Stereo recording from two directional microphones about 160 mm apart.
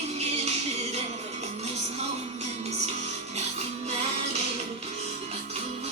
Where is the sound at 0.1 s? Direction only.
40° right (ahead or behind).